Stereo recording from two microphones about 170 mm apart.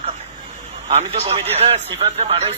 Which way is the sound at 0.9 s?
40° right (ahead or behind).